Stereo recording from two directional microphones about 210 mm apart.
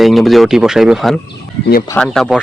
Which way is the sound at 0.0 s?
Centre (ahead or behind).